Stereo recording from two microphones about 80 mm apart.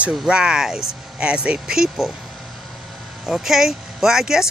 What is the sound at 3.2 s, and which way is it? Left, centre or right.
Speech, centre.